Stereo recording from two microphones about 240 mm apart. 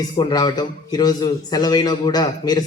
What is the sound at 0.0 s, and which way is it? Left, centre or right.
A man's voice, centre.